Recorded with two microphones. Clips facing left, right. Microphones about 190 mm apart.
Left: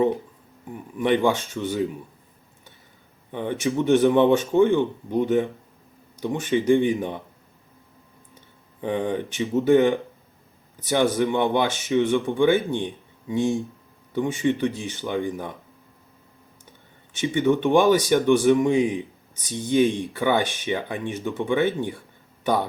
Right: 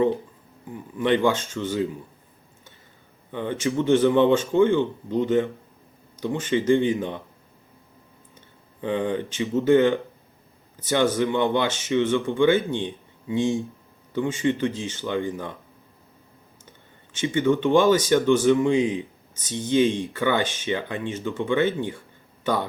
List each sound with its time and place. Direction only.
1.0 s speech: 15° left (ahead or behind)
3.3 s speech: 15° left (ahead or behind)
8.4 s speech: 15° left (ahead or behind)
13.3 s speech: 15° right (ahead or behind)
14.1 s speech: 15° left (ahead or behind)
17.2 s speech: 15° left (ahead or behind)